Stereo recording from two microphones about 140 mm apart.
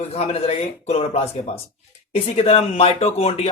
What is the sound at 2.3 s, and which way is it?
Speech, 45° left (ahead or behind).